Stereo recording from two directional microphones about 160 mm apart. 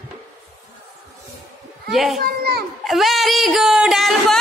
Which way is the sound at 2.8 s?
Centre (ahead or behind).